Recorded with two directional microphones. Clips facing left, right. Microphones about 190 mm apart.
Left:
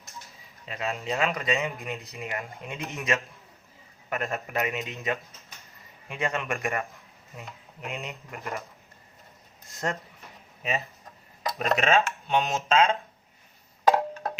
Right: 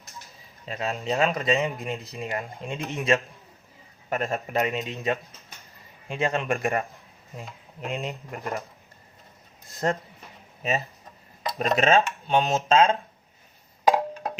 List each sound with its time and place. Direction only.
0.6 s speech: 30° right (ahead or behind)
6.1 s speech: 30° right (ahead or behind)
9.8 s speech: 35° right (ahead or behind)
13.8 s wood block: 10° right (ahead or behind)